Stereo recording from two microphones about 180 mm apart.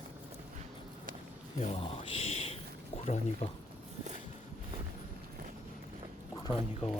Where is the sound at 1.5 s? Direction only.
35° left (ahead or behind).